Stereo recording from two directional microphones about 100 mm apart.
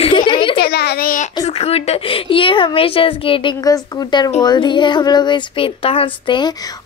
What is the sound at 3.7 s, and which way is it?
Speech, 40° left (ahead or behind).